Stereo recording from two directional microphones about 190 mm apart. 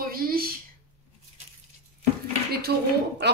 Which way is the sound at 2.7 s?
60° right (ahead or behind).